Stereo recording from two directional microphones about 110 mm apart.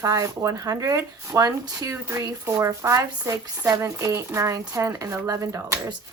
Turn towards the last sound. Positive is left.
turn(degrees=-25)  # may be behind; listen again after turning